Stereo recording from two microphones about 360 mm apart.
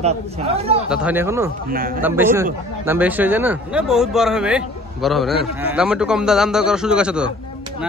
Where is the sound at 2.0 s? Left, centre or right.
Centre.